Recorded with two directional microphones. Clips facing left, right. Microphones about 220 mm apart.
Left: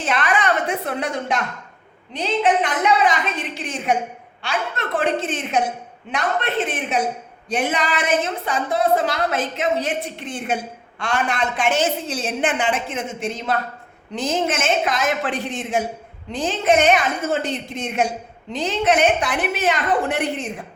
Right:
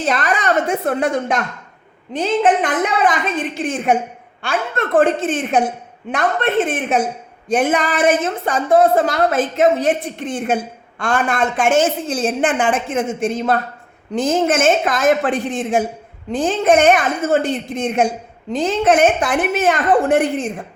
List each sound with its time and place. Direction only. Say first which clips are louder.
0.0 s a woman's voice: right 2 dB; 40° right (ahead or behind)